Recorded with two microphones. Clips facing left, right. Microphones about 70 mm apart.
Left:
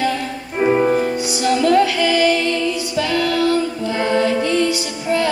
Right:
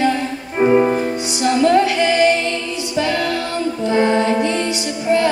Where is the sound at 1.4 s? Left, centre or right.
Right.